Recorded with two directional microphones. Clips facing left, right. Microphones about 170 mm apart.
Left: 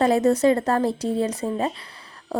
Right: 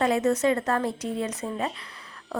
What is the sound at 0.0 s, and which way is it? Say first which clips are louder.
A woman's voice: left 5 dB; 35° left (ahead or behind).